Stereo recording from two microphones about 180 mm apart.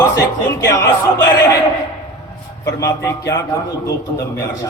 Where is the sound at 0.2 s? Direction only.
15° left (ahead or behind).